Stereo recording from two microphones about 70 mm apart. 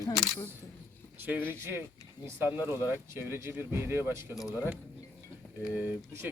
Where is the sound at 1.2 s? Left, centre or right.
Right.